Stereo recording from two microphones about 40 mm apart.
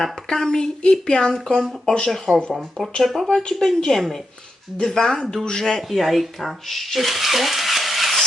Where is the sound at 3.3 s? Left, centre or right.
Centre.